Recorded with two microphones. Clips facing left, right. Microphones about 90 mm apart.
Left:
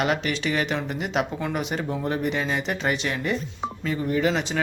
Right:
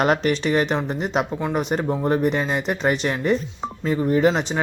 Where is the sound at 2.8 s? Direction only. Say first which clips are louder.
Right 7 dB; 40° right (ahead or behind).